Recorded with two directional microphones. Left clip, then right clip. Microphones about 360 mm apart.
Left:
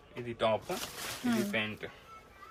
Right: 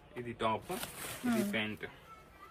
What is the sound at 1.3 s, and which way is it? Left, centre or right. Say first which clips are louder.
Speech: left 2 dB; centre.